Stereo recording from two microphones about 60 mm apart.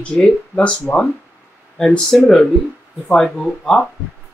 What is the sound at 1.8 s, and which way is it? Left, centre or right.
Speech, centre.